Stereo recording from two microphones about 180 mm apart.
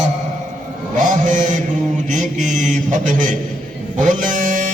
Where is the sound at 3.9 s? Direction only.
45° right (ahead or behind).